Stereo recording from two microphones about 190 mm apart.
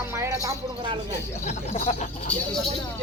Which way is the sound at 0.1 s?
15° right (ahead or behind).